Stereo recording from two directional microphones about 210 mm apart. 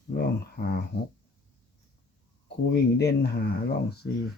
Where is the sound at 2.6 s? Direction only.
50° left (ahead or behind).